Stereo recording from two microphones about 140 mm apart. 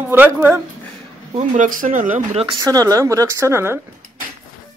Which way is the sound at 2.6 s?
25° right (ahead or behind).